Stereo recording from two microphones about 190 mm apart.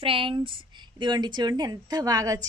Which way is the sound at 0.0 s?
30° right (ahead or behind).